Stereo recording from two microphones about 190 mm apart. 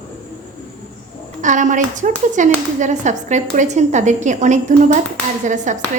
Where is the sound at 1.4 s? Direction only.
40° right (ahead or behind).